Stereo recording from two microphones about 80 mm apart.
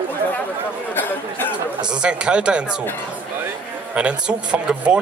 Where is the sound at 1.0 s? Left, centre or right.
Left.